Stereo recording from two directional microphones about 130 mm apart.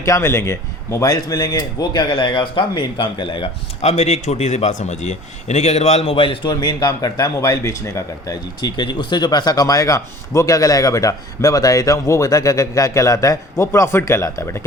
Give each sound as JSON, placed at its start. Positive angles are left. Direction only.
{"t": 0.0, "sound": "speech", "side_deg": 20}
{"t": 3.8, "sound": "a man's voice", "side_deg": 55}